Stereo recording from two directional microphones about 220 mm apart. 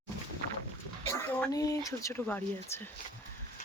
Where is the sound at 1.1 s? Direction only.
15° left (ahead or behind).